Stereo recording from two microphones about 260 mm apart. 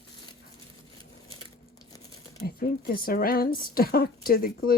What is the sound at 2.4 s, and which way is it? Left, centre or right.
Speech, left.